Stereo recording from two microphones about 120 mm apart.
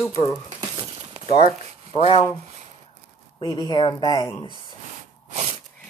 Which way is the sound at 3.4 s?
30° left (ahead or behind).